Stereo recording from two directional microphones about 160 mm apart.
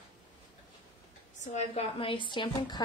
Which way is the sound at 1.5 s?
45° left (ahead or behind).